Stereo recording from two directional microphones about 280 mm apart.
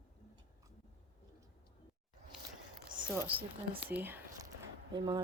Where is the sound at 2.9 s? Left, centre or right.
Centre.